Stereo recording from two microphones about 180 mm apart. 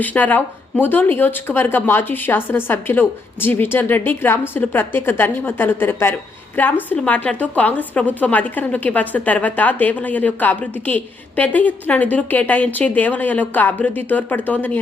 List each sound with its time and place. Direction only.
0.0 s a woman's voice: 10° left (ahead or behind)